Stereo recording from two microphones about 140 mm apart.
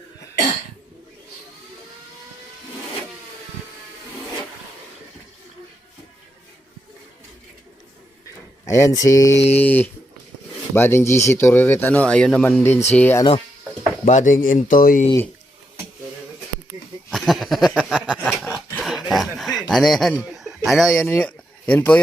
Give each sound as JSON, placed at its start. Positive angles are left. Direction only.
{"t": 8.6, "sound": "speech", "side_deg": 20}
{"t": 9.3, "sound": "mantra", "side_deg": 50}
{"t": 9.6, "sound": "speech", "side_deg": 15}
{"t": 14.0, "sound": "speech", "side_deg": 65}
{"t": 17.1, "sound": "a sound", "side_deg": 0}
{"t": 20.1, "sound": "speech", "side_deg": -5}
{"t": 21.2, "sound": "a sound", "side_deg": 10}